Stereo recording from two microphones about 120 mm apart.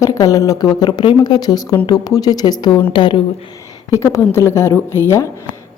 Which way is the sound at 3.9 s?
25° left (ahead or behind).